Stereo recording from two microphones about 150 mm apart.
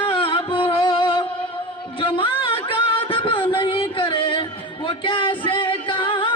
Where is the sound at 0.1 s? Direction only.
35° left (ahead or behind).